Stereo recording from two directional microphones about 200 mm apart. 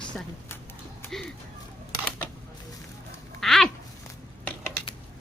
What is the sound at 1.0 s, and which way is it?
Music, centre (ahead or behind).